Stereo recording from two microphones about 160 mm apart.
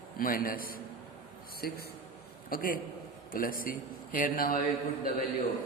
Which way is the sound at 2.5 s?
65° left (ahead or behind).